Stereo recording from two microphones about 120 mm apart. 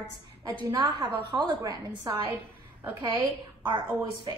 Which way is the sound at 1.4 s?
30° right (ahead or behind).